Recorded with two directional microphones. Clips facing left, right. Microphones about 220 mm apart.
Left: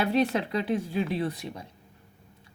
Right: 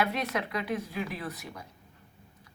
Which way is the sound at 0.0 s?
30° left (ahead or behind).